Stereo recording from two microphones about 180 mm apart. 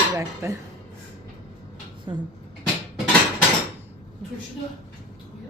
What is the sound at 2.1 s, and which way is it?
Speech, 25° right (ahead or behind).